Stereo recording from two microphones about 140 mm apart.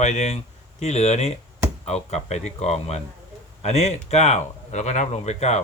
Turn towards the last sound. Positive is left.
turn(degrees=50)  # may be behind; listen again after turning